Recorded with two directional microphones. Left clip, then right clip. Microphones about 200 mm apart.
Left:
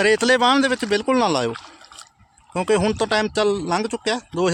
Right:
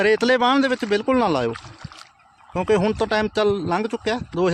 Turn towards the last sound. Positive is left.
turn(degrees=-5)  # may be behind; listen again after turning